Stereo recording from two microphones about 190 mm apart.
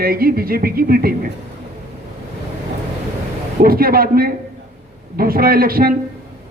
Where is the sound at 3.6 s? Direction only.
50° right (ahead or behind).